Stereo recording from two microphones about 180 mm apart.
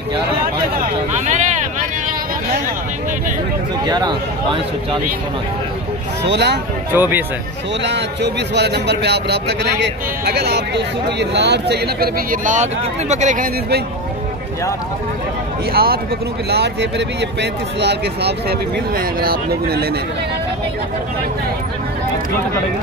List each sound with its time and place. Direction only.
1.2 s a sound: 40° right (ahead or behind)
3.8 s speech: 25° right (ahead or behind)
6.2 s a man's voice: 70° right (ahead or behind)
6.9 s speech: 10° right (ahead or behind)
7.8 s a man's voice: 70° right (ahead or behind); by 13.5 s 40° right (ahead or behind)
15.7 s speech: 55° right (ahead or behind)
16.4 s speech: 70° right (ahead or behind)